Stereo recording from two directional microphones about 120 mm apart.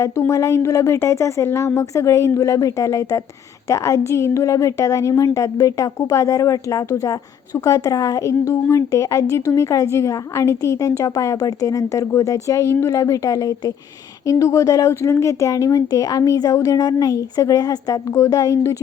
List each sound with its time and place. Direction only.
0.0 s a woman's voice: 25° left (ahead or behind)